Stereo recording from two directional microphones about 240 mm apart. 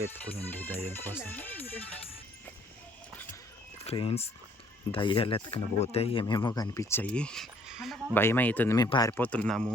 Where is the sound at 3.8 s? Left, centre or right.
Left.